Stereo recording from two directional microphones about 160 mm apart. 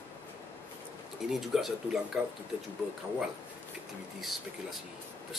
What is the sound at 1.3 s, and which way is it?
Speech, centre (ahead or behind).